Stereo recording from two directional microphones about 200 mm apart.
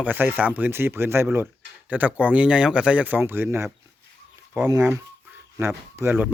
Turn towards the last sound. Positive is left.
turn(degrees=-10)  # may be behind; listen again after turning